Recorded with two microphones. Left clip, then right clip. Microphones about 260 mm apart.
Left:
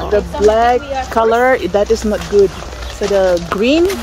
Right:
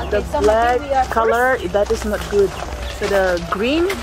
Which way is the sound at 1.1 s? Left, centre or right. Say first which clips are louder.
Left 8 dB; left.